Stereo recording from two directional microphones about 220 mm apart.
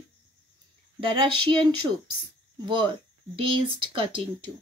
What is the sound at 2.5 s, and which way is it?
Speech, 20° right (ahead or behind).